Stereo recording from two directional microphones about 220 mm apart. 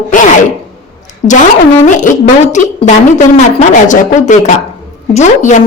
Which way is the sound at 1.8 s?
35° left (ahead or behind).